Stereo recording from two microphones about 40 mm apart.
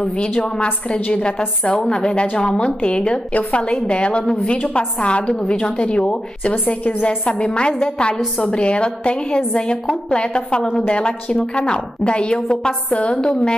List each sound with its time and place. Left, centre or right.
0.0 s a woman's voice: left
6.5 s a woman's voice: left